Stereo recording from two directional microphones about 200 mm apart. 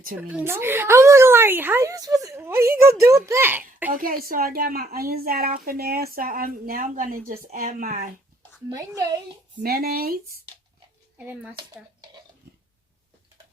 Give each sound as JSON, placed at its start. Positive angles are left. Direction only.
{"t": 0.2, "sound": "a woman's voice", "side_deg": -10}
{"t": 3.9, "sound": "speech", "side_deg": -45}
{"t": 9.6, "sound": "speech", "side_deg": -50}